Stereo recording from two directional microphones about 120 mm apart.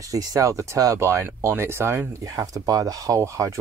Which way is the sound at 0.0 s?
30° right (ahead or behind).